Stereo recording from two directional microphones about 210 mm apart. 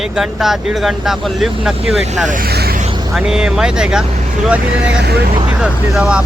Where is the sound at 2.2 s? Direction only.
45° right (ahead or behind).